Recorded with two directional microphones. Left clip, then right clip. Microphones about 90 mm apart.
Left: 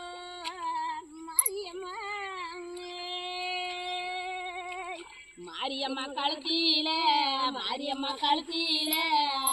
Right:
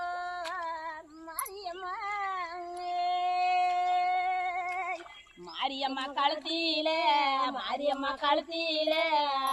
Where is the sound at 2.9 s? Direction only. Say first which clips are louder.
Right 9 dB; 40° right (ahead or behind).